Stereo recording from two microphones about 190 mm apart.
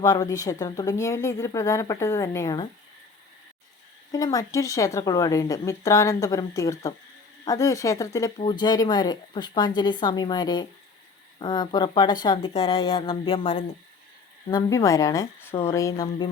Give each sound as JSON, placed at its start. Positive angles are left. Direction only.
{"t": 0.0, "sound": "a woman's voice", "side_deg": 20}
{"t": 4.1, "sound": "a woman's voice", "side_deg": 20}
{"t": 14.5, "sound": "a woman's voice", "side_deg": 15}